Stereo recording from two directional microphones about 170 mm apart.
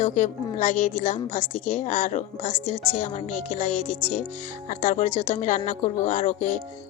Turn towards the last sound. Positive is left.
turn(degrees=50)  # may be behind; listen again after turning